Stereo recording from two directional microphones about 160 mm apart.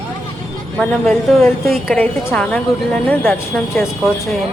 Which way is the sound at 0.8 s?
5° left (ahead or behind).